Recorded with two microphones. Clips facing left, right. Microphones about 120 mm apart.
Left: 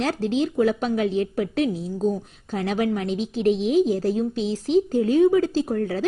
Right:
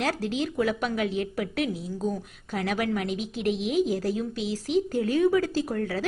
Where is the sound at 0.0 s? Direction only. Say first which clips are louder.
Left 5 dB; 25° left (ahead or behind).